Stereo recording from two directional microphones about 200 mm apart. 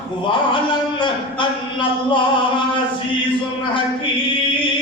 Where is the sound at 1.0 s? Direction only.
25° left (ahead or behind).